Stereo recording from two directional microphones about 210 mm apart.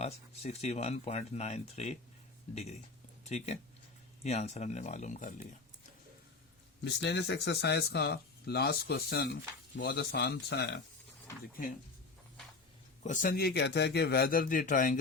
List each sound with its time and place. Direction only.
0.0 s speech: 30° left (ahead or behind)
3.2 s speech: 30° left (ahead or behind)
6.8 s speech: 55° left (ahead or behind)
13.0 s speech: 35° left (ahead or behind)